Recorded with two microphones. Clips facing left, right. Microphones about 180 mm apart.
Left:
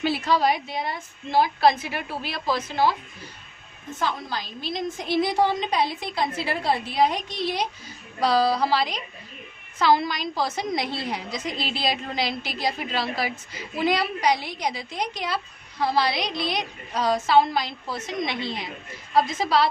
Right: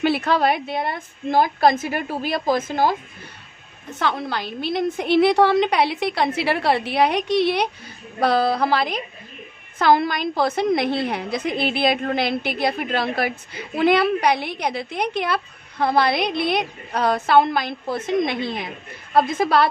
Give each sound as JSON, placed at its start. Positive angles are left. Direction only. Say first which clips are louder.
{"t": 0.0, "sound": "a woman's voice", "louder": "right 3 dB", "side_deg": -60}
{"t": 4.0, "sound": "a woman's voice", "louder": "right 5 dB", "side_deg": -65}
{"t": 8.2, "sound": "a woman's voice", "louder": "right 2 dB", "side_deg": -55}